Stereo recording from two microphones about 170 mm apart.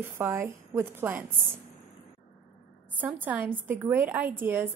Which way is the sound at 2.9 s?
10° right (ahead or behind).